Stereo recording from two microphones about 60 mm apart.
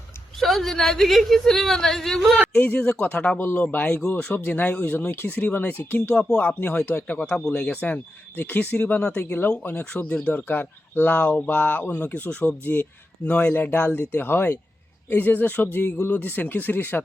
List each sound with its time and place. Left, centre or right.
0.3 s a woman's voice: centre
2.6 s speech: left
7.3 s speech: centre; by 8.8 s left
8.8 s speech: centre
9.4 s speech: left
10.1 s speech: centre
10.3 s speech: left